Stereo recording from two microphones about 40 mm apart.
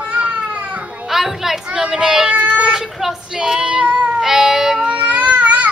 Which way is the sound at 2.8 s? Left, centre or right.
Centre.